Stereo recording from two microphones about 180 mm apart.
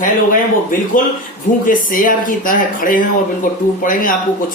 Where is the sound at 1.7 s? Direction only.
50° left (ahead or behind).